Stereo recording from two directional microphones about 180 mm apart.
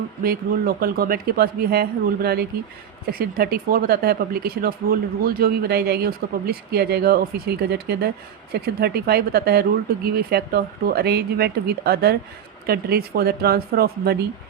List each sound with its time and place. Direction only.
0.2 s speech: 55° right (ahead or behind)